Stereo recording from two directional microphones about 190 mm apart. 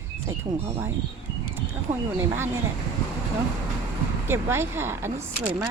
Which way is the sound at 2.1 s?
10° right (ahead or behind).